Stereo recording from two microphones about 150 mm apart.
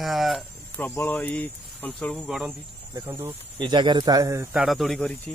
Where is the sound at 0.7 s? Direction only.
15° left (ahead or behind); by 2.5 s 5° right (ahead or behind).